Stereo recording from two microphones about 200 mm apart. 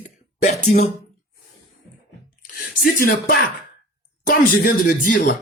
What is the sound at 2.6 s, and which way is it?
Speech, 45° left (ahead or behind).